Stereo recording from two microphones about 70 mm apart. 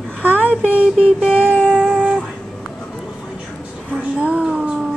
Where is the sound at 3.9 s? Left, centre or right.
Centre.